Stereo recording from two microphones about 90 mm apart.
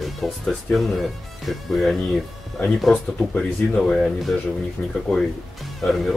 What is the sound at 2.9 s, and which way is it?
Speech, 15° left (ahead or behind).